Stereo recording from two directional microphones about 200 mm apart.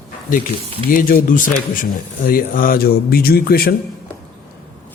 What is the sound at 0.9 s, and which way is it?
A man's voice, 45° left (ahead or behind).